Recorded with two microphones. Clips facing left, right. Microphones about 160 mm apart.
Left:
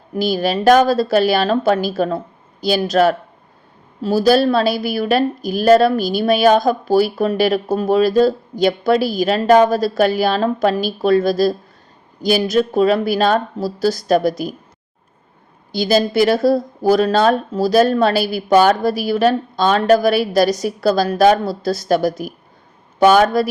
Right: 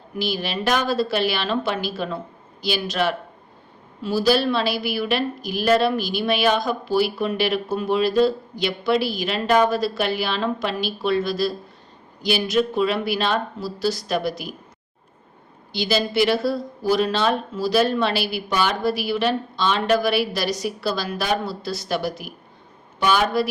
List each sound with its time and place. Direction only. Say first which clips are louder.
0.2 s a woman's voice: left 8 dB; 40° left (ahead or behind)
15.7 s speech: left 6 dB; 40° left (ahead or behind)